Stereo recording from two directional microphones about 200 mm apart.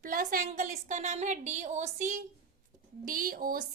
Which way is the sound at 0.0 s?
45° right (ahead or behind).